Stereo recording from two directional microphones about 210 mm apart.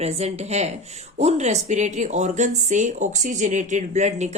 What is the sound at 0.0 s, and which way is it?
Speech, 30° right (ahead or behind).